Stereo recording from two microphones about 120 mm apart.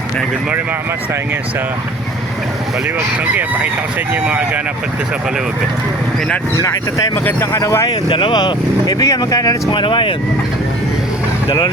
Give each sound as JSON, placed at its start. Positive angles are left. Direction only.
{"t": 3.3, "sound": "speech", "side_deg": -15}
{"t": 7.3, "sound": "speech", "side_deg": 25}
{"t": 8.1, "sound": "speech", "side_deg": 40}
{"t": 11.4, "sound": "speech", "side_deg": 40}